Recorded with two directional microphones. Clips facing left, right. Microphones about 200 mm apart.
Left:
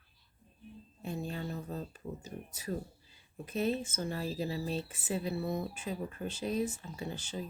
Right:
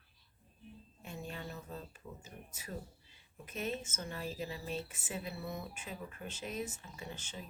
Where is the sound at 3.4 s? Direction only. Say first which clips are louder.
Left 7 dB; 35° left (ahead or behind).